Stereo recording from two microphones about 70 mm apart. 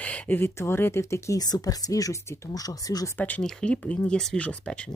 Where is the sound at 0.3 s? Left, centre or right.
Left.